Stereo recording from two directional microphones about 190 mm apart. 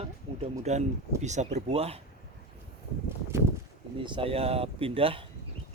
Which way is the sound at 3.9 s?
25° right (ahead or behind).